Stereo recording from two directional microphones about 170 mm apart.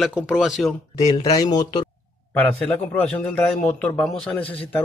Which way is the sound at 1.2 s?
25° left (ahead or behind).